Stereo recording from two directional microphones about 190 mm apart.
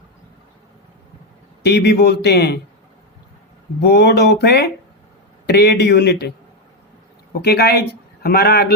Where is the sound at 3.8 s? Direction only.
60° left (ahead or behind).